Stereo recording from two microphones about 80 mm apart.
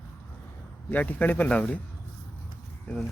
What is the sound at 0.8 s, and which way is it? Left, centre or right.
Speech, left.